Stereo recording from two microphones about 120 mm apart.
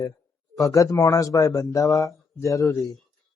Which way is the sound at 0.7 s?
30° left (ahead or behind).